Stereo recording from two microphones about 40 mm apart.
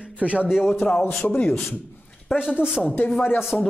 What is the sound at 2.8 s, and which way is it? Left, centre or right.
Speech, left.